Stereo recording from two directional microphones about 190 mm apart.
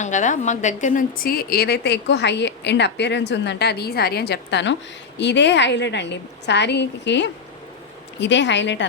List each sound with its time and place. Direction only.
0.0 s a woman's voice: 40° left (ahead or behind); by 8.9 s 70° left (ahead or behind)